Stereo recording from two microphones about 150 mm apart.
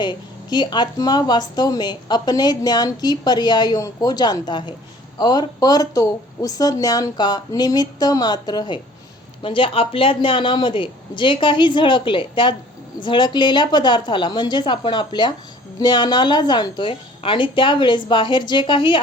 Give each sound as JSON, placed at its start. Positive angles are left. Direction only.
{"t": 0.0, "sound": "a woman's voice", "side_deg": 30}